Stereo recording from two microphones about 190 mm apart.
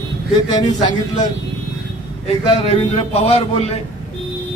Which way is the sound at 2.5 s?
35° left (ahead or behind).